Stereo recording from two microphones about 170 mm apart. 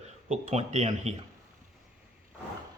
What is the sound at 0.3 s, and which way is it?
Speech, 40° right (ahead or behind).